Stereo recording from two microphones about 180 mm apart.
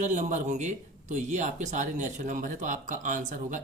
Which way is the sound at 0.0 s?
40° right (ahead or behind).